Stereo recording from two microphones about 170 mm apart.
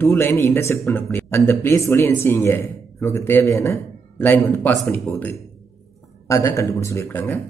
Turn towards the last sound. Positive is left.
turn(degrees=10)  # may be behind; listen again after turning